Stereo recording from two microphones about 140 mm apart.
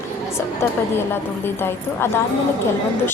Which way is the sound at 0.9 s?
15° left (ahead or behind).